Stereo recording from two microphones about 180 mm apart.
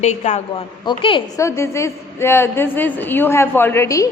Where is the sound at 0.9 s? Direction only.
25° left (ahead or behind).